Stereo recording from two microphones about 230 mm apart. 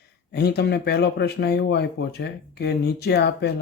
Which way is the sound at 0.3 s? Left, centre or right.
Left.